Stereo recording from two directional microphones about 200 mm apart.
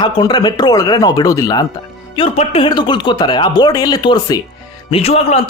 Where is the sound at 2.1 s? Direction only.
30° left (ahead or behind).